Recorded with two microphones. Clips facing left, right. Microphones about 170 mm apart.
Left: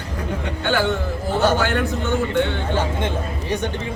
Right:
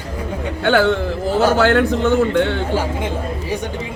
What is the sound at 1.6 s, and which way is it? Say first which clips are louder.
Speech: right 7 dB; 65° right (ahead or behind).